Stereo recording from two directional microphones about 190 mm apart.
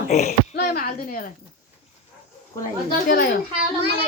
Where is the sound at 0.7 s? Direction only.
50° left (ahead or behind).